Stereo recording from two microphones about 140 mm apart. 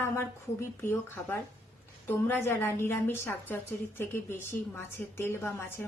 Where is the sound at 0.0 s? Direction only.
15° left (ahead or behind).